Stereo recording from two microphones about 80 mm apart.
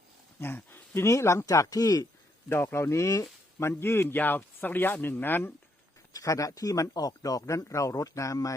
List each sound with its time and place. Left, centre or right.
0.3 s speech: left
2.5 s speech: left
6.1 s a man's voice: left